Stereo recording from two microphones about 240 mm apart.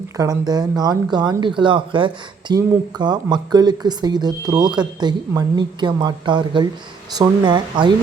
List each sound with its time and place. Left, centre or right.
0.2 s speech: centre